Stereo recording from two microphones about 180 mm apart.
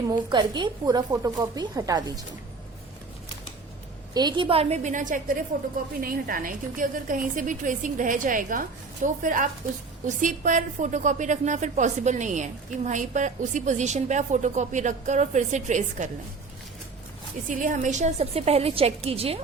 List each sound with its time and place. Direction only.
0.1 s a woman's voice: 25° right (ahead or behind)
4.1 s a woman's voice: 25° right (ahead or behind); by 16.0 s 40° right (ahead or behind)
17.5 s a woman's voice: 45° right (ahead or behind)